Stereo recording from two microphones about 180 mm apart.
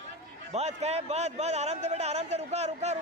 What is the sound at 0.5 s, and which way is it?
A man's voice, 35° right (ahead or behind).